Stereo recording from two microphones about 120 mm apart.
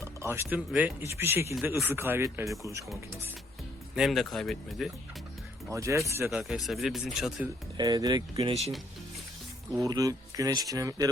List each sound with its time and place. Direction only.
0.0 s a sound: 20° right (ahead or behind)
0.7 s speech: 15° right (ahead or behind)
3.9 s speech: centre (ahead or behind)
5.7 s speech: 25° right (ahead or behind)
6.3 s speech: 5° right (ahead or behind)
7.8 s speech: 35° right (ahead or behind)
9.7 s speech: 30° right (ahead or behind)